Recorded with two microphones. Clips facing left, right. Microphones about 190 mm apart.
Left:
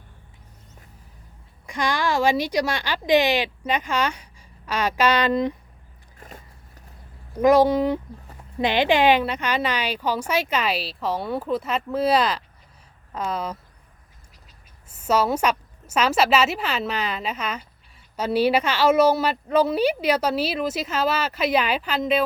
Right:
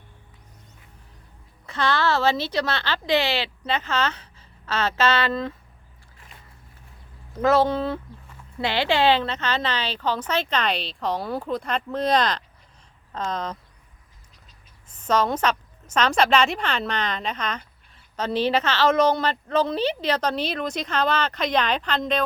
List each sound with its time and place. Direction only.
1.6 s a woman's voice: 15° left (ahead or behind)
6.1 s biting: 45° left (ahead or behind)
7.4 s a woman's voice: 15° left (ahead or behind)
14.8 s a woman's voice: 10° left (ahead or behind)